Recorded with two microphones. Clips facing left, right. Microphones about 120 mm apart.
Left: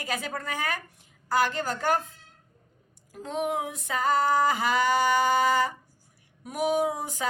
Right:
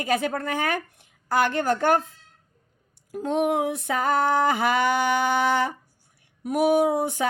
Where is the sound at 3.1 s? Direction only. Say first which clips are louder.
Right 6 dB; 60° right (ahead or behind).